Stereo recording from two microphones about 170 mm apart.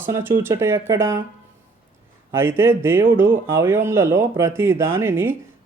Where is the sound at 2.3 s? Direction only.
15° right (ahead or behind).